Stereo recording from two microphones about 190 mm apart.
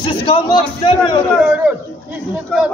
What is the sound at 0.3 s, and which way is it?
Speech, 25° left (ahead or behind).